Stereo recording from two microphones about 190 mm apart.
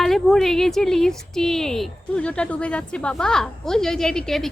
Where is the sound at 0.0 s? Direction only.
Centre (ahead or behind).